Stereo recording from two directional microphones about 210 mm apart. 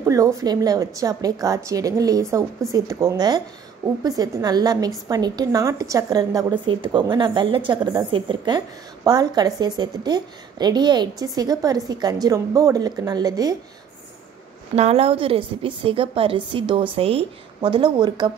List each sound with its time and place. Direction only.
0.0 s a woman's voice: 15° right (ahead or behind)
14.8 s a woman's voice: 30° right (ahead or behind)